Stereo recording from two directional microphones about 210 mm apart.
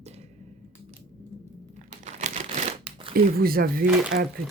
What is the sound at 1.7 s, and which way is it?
Crumpling, 35° right (ahead or behind).